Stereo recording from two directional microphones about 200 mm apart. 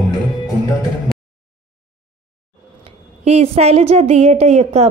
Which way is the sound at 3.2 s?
30° right (ahead or behind).